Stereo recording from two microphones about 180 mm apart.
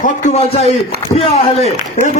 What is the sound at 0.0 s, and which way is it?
A man's voice, 45° left (ahead or behind).